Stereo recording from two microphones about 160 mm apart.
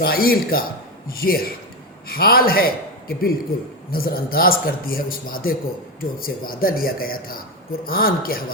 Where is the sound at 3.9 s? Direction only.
70° left (ahead or behind).